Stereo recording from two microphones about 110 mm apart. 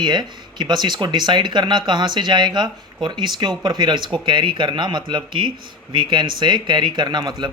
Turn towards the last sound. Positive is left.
turn(degrees=-40)  # may be behind; listen again after turning